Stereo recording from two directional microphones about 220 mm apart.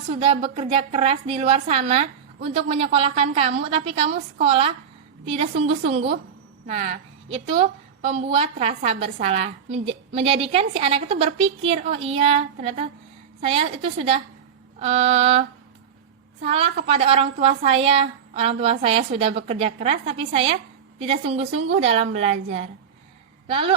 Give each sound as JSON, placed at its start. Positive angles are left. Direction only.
{"t": 0.1, "sound": "a woman's voice", "side_deg": -25}